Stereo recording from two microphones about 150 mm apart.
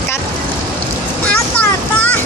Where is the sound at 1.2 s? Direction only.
10° left (ahead or behind).